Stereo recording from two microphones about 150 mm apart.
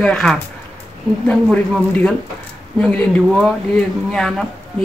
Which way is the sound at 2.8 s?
5° left (ahead or behind).